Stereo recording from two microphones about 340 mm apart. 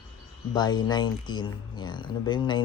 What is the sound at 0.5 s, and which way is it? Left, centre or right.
Speech, centre.